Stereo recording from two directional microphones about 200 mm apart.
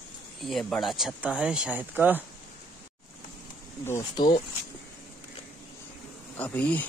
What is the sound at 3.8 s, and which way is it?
Speech, 15° left (ahead or behind).